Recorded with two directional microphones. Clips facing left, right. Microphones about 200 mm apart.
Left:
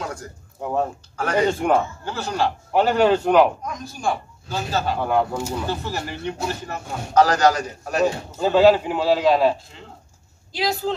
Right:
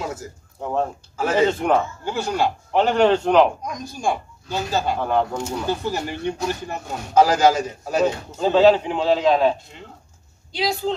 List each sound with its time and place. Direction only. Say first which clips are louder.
0.0 s a sound: right 2 dB; 5° right (ahead or behind)
0.6 s a man's voice: even; 5° left (ahead or behind)
1.1 s a man's voice: right 2 dB; 5° right (ahead or behind)
1.5 s a man's voice: even; 10° left (ahead or behind)
2.0 s speech: right 3 dB; 10° right (ahead or behind)
2.7 s a man's voice: even; 5° left (ahead or behind)
3.6 s speech: right 1 dB; 15° right (ahead or behind)
4.9 s a man's voice: even; 5° left (ahead or behind)
5.7 s a man's voice: right 3 dB; 15° right (ahead or behind); by 11.0 s centre (ahead or behind)